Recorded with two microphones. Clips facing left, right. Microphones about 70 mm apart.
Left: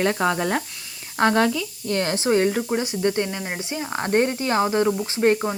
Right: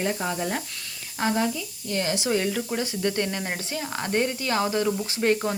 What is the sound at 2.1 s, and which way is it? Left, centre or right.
Speech, left.